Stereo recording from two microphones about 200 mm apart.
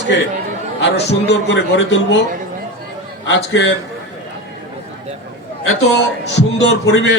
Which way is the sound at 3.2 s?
60° left (ahead or behind).